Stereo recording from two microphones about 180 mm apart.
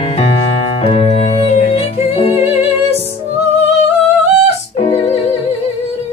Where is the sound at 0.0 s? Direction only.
35° left (ahead or behind).